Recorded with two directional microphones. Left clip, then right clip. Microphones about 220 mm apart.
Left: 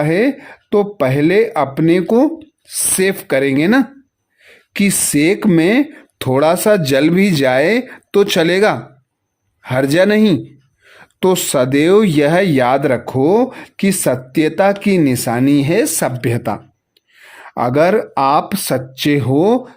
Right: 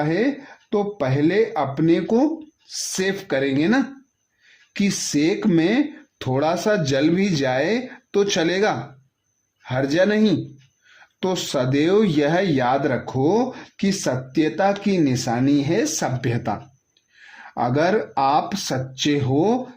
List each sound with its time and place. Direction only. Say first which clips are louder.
0.0 s speech: left 7 dB; 30° left (ahead or behind)
4.4 s a sound: left 7 dB; 35° left (ahead or behind)
5.1 s speech: left 6 dB; 30° left (ahead or behind)